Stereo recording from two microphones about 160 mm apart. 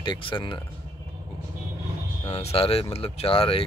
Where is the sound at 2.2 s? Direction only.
35° left (ahead or behind).